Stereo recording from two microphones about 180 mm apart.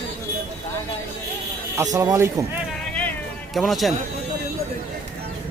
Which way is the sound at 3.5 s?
Centre (ahead or behind).